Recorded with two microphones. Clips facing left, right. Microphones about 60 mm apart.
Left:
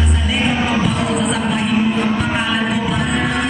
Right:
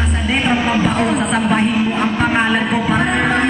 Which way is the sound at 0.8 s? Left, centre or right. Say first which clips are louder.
Right 2 dB; right.